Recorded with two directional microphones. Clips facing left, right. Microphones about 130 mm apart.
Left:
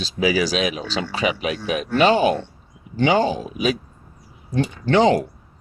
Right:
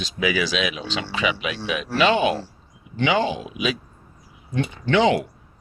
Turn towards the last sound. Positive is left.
turn(degrees=40)  # may be behind; listen again after turning